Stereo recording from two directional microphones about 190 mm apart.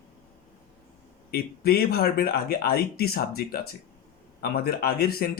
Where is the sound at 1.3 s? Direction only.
55° left (ahead or behind).